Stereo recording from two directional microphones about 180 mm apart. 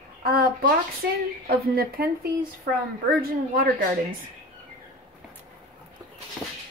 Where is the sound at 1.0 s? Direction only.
65° right (ahead or behind).